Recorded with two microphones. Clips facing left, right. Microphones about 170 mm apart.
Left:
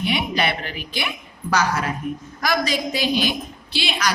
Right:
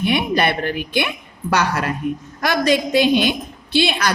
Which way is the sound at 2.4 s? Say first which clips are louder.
Right 5 dB; 60° right (ahead or behind).